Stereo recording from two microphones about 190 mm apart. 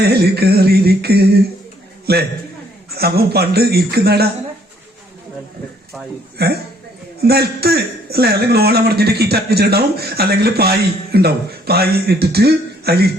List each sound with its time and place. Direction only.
0.0 s a man's voice: 60° right (ahead or behind)
2.9 s a man's voice: 55° right (ahead or behind)
6.3 s a man's voice: 55° right (ahead or behind)